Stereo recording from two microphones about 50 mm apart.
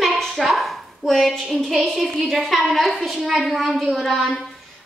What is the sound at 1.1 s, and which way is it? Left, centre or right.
A woman's voice, centre.